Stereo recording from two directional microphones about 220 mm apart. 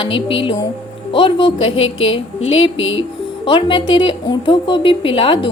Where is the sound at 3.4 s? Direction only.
20° left (ahead or behind).